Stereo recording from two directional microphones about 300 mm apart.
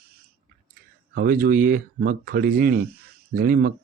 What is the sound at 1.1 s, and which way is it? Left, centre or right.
Speech, right.